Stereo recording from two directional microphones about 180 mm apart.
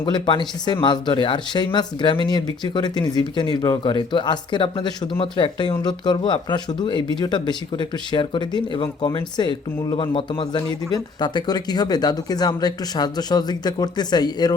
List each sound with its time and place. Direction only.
0.0 s speech: 25° left (ahead or behind)